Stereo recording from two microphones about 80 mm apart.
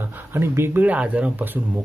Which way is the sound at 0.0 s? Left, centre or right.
Right.